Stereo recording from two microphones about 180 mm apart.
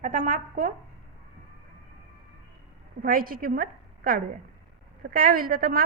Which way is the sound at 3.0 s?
55° right (ahead or behind).